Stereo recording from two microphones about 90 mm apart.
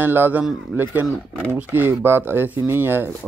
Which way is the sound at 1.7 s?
20° right (ahead or behind).